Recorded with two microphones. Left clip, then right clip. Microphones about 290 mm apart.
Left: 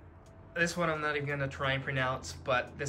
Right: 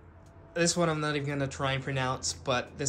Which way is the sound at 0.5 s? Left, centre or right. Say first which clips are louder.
Right 3 dB; centre.